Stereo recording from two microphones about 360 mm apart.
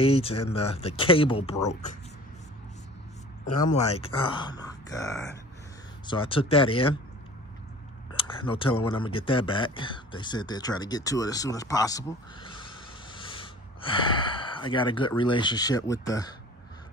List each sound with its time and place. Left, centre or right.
0.0 s speech: centre
3.5 s speech: centre
8.1 s a sound: centre
8.8 s speech: centre